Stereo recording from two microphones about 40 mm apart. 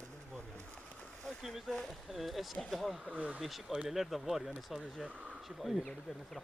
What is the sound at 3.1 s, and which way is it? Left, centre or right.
Speech, right.